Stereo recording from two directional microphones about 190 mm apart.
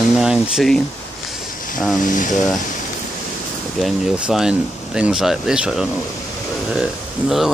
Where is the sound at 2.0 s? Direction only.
40° left (ahead or behind).